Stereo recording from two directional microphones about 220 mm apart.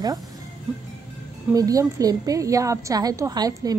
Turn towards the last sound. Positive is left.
turn(degrees=-15)  # may be behind; listen again after turning